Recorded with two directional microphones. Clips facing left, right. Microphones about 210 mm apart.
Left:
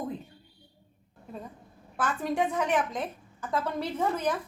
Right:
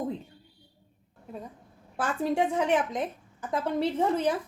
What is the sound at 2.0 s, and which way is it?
A woman's voice, 30° right (ahead or behind).